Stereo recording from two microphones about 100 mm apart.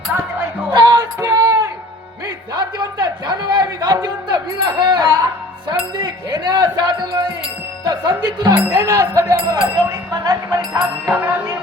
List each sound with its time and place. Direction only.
0.7 s speech: 50° right (ahead or behind)
1.2 s a sound: 30° right (ahead or behind)
2.5 s a man's voice: 45° right (ahead or behind)